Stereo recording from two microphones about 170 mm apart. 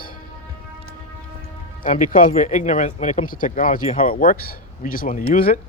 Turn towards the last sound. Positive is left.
turn(degrees=55)  # may be behind; listen again after turning